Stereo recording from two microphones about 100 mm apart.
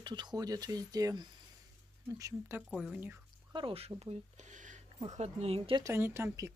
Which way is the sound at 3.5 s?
70° right (ahead or behind).